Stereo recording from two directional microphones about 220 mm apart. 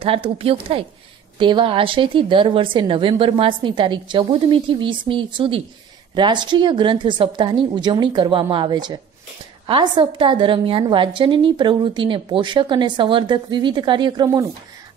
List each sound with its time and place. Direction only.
0.0 s a woman's voice: 25° right (ahead or behind)